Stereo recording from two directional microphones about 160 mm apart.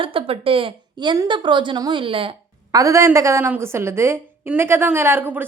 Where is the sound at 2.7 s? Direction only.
20° right (ahead or behind).